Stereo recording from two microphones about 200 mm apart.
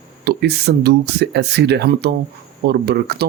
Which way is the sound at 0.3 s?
55° right (ahead or behind).